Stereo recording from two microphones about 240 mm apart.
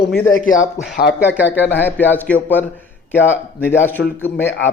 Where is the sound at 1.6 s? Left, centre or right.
Centre.